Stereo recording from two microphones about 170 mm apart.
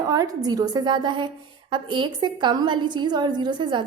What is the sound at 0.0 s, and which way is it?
A woman's voice, 20° right (ahead or behind).